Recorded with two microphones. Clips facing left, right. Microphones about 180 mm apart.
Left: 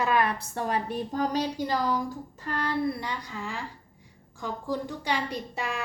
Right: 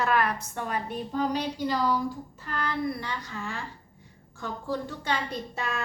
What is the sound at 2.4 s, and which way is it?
A woman's voice, 35° left (ahead or behind).